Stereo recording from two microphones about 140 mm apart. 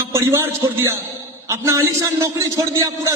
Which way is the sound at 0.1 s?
20° right (ahead or behind).